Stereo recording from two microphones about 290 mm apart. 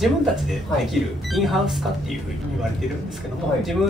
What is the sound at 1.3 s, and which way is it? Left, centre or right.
Speech, centre.